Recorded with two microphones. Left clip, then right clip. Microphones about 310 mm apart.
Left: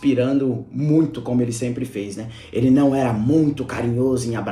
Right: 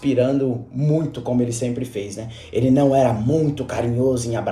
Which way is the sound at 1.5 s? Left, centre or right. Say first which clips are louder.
Right 1 dB; centre.